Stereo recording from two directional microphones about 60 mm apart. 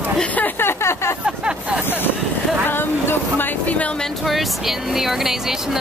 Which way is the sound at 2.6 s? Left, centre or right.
Left.